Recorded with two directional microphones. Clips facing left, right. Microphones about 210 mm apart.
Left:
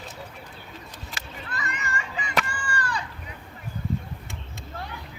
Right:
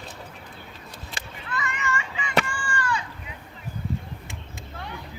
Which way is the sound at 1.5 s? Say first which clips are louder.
Right 4 dB; 40° left (ahead or behind).